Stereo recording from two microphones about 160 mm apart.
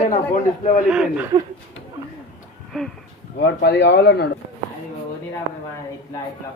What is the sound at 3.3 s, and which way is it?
Speech, 90° left.